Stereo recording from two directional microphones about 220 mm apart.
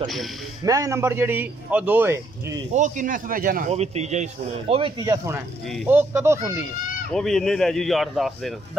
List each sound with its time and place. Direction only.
0.7 s a man's voice: 15° right (ahead or behind)
2.7 s speech: 35° right (ahead or behind)
5.0 s a man's voice: 15° right (ahead or behind)
7.1 s speech: centre (ahead or behind)